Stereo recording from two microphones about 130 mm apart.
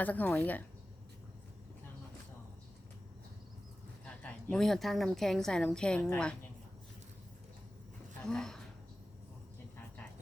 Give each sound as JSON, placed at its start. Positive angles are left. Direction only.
{"t": 0.0, "sound": "a woman's voice", "side_deg": 10}
{"t": 4.0, "sound": "a woman's voice", "side_deg": 10}
{"t": 8.2, "sound": "speech", "side_deg": 5}